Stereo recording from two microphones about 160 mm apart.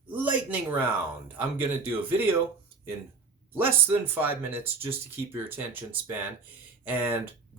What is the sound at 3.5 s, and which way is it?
Speech, 10° right (ahead or behind).